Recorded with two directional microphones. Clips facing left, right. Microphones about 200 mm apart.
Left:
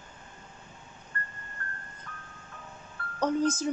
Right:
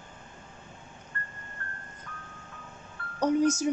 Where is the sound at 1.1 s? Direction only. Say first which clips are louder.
Left 2 dB; 40° left (ahead or behind).